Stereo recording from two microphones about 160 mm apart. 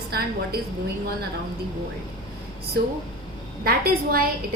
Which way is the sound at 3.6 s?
70° right (ahead or behind).